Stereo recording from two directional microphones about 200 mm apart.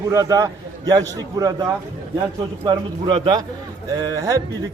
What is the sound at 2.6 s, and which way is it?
A man's voice, 25° right (ahead or behind).